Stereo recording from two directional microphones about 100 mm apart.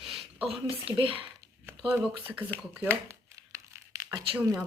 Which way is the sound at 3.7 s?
30° right (ahead or behind).